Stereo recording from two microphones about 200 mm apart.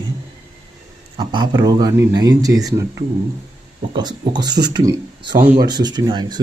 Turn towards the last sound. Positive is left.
turn(degrees=-20)  # may be behind; listen again after turning